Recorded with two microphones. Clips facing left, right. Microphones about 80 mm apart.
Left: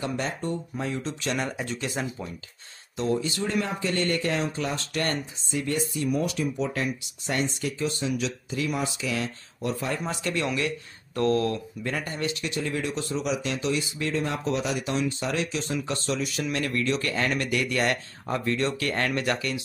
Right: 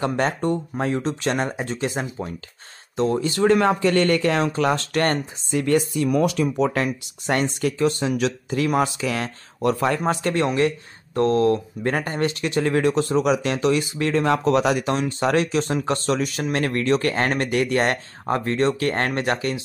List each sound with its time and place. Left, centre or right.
0.0 s speech: right
3.0 s speech: right
10.2 s speech: right
11.8 s speech: right